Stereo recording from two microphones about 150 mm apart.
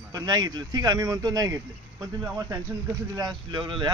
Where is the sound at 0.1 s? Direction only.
25° right (ahead or behind).